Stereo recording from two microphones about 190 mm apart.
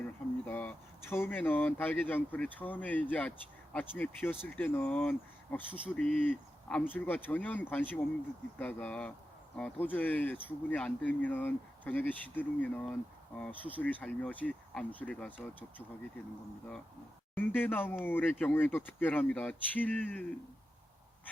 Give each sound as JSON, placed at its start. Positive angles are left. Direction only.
{"t": 0.4, "sound": "speech", "side_deg": 10}
{"t": 17.3, "sound": "speech", "side_deg": 10}